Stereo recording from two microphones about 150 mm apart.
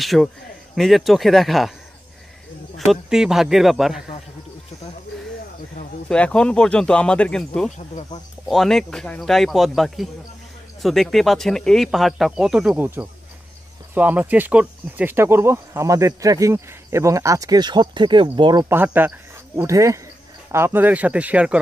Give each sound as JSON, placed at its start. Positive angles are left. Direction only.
{"t": 0.0, "sound": "speech", "side_deg": 0}
{"t": 2.9, "sound": "speech", "side_deg": -5}
{"t": 5.1, "sound": "a sound", "side_deg": 0}
{"t": 6.0, "sound": "speech", "side_deg": 5}
{"t": 18.7, "sound": "speech", "side_deg": -15}